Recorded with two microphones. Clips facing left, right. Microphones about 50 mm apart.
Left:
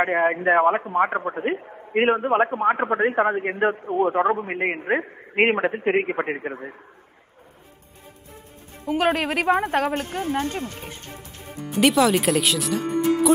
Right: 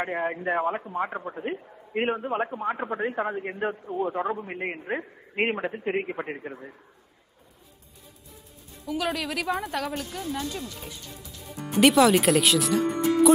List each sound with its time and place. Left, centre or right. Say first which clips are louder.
0.0 s a man's voice: left 8 dB; left
8.8 s a man's voice: left 7 dB; left
11.7 s speech: even; centre